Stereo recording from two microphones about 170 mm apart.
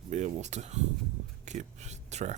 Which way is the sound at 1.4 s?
40° right (ahead or behind).